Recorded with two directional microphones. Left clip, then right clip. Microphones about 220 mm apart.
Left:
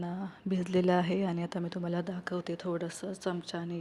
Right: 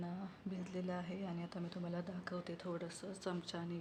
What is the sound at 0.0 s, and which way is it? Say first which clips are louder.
Speech: left 9 dB; 30° left (ahead or behind).